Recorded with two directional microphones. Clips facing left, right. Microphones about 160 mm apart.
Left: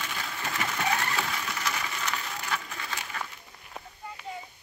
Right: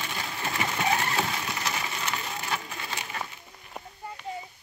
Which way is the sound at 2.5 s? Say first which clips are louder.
Even; 25° right (ahead or behind).